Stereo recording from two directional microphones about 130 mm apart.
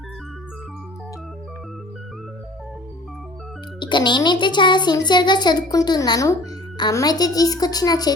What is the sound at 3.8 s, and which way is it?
A child's voice, 35° left (ahead or behind).